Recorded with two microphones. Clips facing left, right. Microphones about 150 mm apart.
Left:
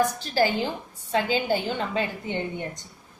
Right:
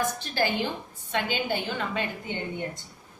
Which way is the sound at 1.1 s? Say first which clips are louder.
Left 4 dB; 30° left (ahead or behind).